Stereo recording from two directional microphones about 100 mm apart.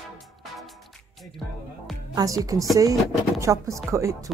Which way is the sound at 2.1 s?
35° right (ahead or behind).